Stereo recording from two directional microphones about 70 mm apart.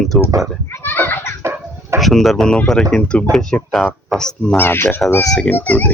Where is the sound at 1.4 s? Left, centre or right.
Right.